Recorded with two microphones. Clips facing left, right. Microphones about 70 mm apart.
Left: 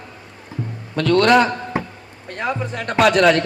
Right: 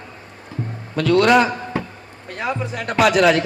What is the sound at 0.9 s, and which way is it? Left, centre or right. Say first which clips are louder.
A man's voice: even; centre.